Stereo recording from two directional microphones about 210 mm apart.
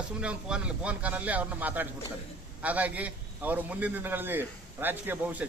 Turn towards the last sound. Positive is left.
turn(degrees=-10)  # may be behind; listen again after turning